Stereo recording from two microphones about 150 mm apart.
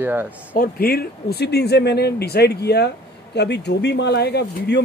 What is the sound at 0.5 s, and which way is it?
Speech, 80° left.